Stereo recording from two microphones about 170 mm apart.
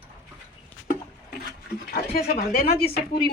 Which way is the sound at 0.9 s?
65° left (ahead or behind).